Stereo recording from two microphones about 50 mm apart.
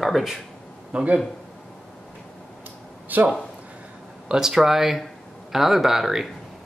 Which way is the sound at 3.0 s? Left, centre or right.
Right.